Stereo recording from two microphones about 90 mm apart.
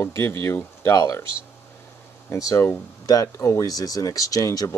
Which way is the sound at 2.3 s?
40° left (ahead or behind).